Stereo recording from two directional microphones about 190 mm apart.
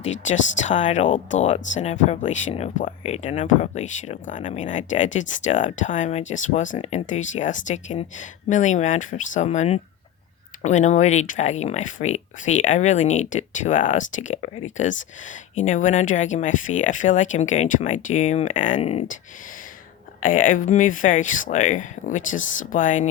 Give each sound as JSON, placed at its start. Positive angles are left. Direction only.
{"t": 0.0, "sound": "speech", "side_deg": 40}
{"t": 20.2, "sound": "speech", "side_deg": 45}